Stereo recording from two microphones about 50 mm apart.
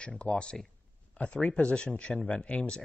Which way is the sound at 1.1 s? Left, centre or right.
Left.